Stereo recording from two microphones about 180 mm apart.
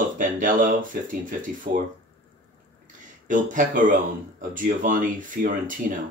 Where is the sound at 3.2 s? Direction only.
45° right (ahead or behind).